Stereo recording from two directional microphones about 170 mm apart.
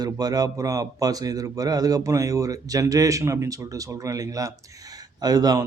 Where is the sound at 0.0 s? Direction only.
20° right (ahead or behind).